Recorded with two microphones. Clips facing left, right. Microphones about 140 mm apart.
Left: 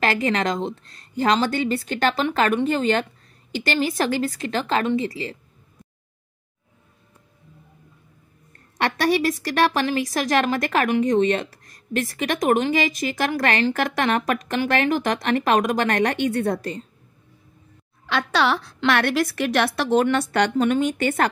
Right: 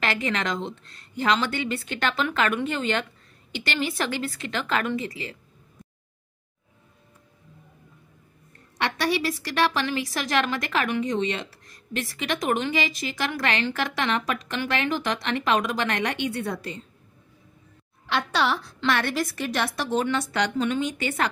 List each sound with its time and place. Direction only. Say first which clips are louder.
0.0 s a woman's voice: left 5 dB; 40° left (ahead or behind)
8.7 s a woman's voice: left 5 dB; 45° left (ahead or behind)
18.3 s a woman's voice: left 5 dB; 80° left; by 21.3 s 50° left (ahead or behind)